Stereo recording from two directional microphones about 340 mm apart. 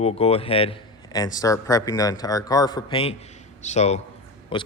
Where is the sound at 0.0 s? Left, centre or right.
Centre.